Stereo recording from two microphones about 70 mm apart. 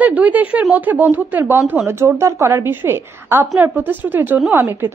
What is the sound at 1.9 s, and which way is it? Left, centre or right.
A woman's voice, right.